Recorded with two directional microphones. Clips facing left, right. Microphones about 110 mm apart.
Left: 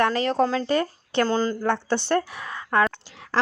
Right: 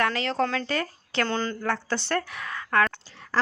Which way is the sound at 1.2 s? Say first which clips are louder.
Left 5 dB; 35° left (ahead or behind).